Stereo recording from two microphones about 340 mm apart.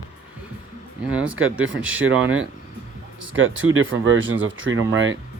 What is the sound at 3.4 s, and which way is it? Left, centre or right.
Speech, right.